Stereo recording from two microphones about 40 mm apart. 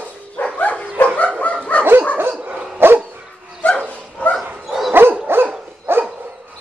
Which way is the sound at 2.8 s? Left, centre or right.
Right.